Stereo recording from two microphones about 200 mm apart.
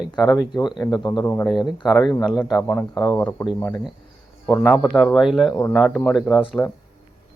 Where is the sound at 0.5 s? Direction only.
20° left (ahead or behind); by 6.6 s centre (ahead or behind).